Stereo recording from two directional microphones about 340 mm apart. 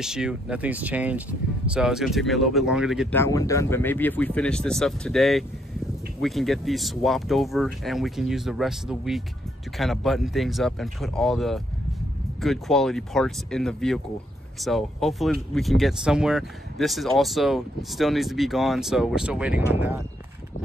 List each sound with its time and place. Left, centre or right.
0.0 s speech: centre